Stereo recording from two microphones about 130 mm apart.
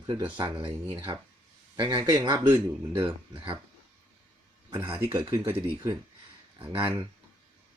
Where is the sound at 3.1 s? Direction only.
40° right (ahead or behind).